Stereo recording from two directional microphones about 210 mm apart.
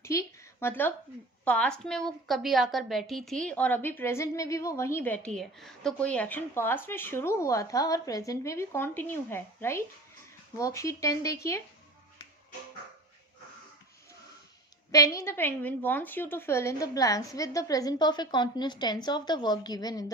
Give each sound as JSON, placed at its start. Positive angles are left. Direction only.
{"t": 0.0, "sound": "a woman's voice", "side_deg": 15}
{"t": 14.9, "sound": "a woman's voice", "side_deg": 15}